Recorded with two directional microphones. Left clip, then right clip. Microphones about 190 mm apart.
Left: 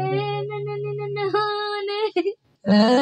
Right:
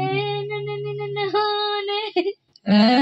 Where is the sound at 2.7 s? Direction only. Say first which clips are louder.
Even; 50° left (ahead or behind).